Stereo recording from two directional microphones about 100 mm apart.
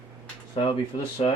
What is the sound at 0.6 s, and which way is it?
Speech, 60° left (ahead or behind).